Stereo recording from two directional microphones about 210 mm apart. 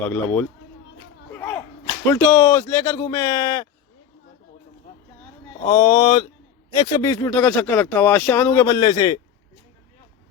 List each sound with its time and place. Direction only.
0.0 s speech: 10° left (ahead or behind)
1.3 s whip: 10° left (ahead or behind)
2.0 s speech: 10° left (ahead or behind)
5.6 s speech: 20° left (ahead or behind)